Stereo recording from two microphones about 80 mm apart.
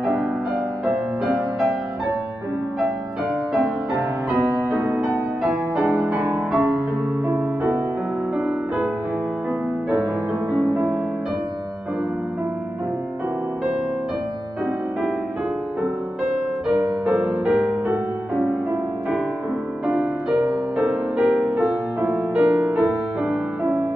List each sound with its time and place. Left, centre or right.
0.0 s music: centre
4.6 s music: right
5.8 s music: centre
7.2 s music: right
8.4 s music: centre
10.7 s music: right
16.6 s music: centre
19.9 s music: centre